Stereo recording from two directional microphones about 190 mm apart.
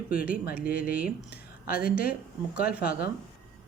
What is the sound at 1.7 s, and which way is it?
Speech, 50° left (ahead or behind).